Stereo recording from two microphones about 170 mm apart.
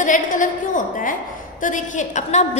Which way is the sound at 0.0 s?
50° left (ahead or behind).